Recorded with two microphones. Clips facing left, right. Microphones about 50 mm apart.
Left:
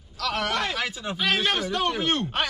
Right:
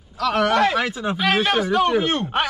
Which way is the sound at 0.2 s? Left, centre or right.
Centre.